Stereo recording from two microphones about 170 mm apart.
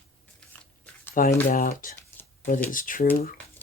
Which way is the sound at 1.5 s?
55° left (ahead or behind).